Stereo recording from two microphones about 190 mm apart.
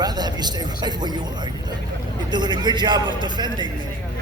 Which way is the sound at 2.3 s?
25° right (ahead or behind).